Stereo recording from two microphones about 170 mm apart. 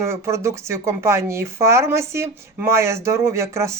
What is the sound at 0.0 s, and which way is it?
Speech, 15° right (ahead or behind).